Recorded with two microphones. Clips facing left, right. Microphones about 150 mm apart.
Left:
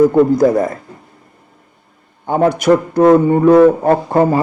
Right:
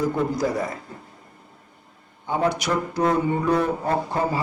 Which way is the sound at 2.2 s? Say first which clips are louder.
Left 10 dB; 50° left (ahead or behind).